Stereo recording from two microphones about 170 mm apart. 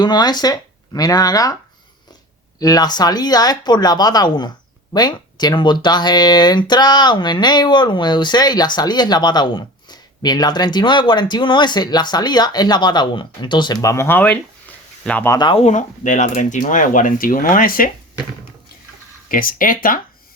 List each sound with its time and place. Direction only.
0.0 s speech: 25° left (ahead or behind)
2.6 s speech: 20° left (ahead or behind)
15.4 s speech: 30° left (ahead or behind)
15.6 s speech: 45° left (ahead or behind)
19.3 s speech: 55° left (ahead or behind)